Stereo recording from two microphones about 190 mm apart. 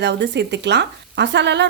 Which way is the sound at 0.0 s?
65° right (ahead or behind).